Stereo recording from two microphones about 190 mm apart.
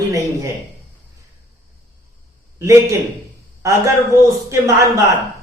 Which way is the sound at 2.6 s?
15° right (ahead or behind).